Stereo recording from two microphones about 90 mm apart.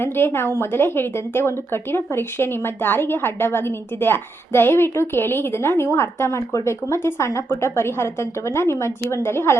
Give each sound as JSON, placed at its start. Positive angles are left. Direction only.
{"t": 0.0, "sound": "a woman's voice", "side_deg": 25}